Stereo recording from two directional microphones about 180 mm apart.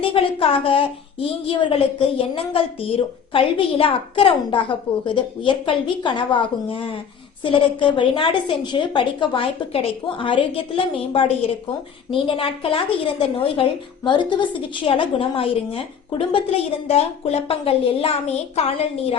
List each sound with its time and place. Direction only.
0.0 s a woman's voice: 30° left (ahead or behind)